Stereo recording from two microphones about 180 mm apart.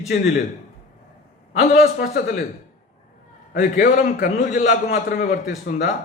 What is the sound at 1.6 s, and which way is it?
Speech, 50° left (ahead or behind).